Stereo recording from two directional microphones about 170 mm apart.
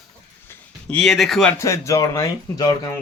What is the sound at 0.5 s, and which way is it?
Speech, 5° left (ahead or behind).